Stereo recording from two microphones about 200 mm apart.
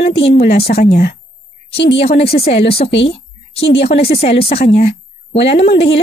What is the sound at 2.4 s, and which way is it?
Speech, 50° left (ahead or behind).